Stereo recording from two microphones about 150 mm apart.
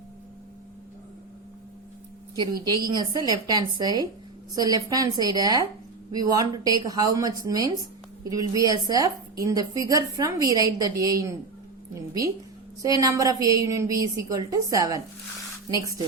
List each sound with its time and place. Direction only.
2.3 s a woman's voice: 30° right (ahead or behind)
12.8 s a woman's voice: 20° right (ahead or behind)